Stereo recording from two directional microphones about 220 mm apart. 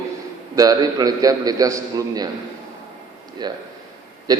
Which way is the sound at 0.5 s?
15° right (ahead or behind).